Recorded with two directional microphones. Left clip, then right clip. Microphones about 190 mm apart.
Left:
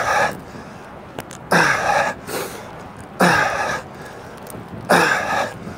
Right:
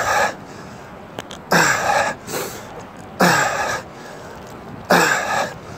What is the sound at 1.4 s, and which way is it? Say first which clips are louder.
Cough: even; centre (ahead or behind).